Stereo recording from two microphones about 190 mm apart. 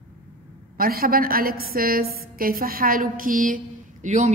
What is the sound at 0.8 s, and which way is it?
A woman's voice, 50° right (ahead or behind).